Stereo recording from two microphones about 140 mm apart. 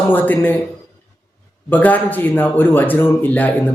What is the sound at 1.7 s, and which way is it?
Speech, 10° left (ahead or behind).